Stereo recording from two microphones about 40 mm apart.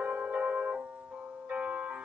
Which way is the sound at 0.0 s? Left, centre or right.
Right.